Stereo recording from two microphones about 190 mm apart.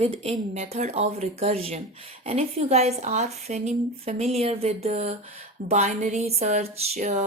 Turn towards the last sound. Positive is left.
turn(degrees=-35)  # may be behind; listen again after turning